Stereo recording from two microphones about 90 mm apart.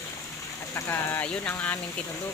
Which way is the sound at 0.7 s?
25° left (ahead or behind).